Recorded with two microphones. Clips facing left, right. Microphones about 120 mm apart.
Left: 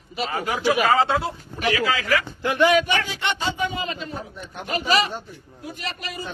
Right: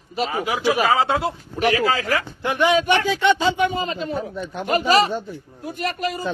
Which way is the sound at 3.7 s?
35° right (ahead or behind).